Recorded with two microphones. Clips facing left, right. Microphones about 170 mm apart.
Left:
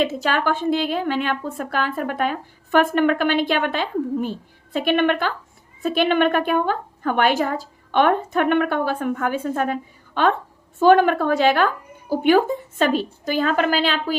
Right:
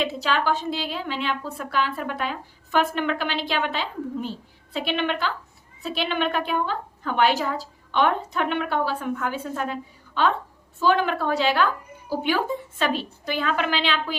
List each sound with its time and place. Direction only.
0.0 s a woman's voice: 50° left (ahead or behind)
10.8 s a woman's voice: 50° left (ahead or behind)